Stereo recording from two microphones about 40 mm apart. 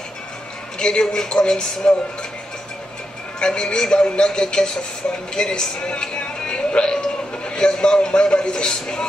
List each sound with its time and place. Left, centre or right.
0.7 s a man's voice: centre
3.3 s a man's voice: left